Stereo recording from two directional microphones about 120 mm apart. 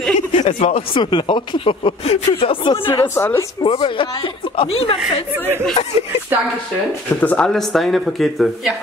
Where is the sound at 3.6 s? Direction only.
50° left (ahead or behind).